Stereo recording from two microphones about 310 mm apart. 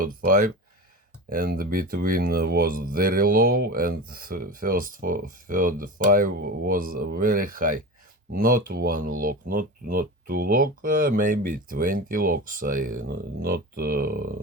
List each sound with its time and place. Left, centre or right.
0.0 s speech: right